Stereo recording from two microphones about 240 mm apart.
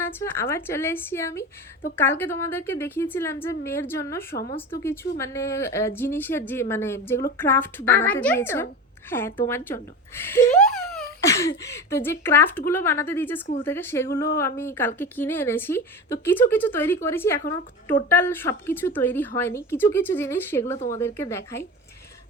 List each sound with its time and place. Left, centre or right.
0.0 s a woman's voice: centre
20.7 s a woman's voice: left
21.0 s a woman's voice: centre